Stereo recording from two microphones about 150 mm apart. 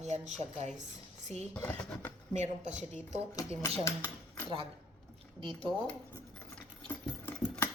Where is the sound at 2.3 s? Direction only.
50° right (ahead or behind).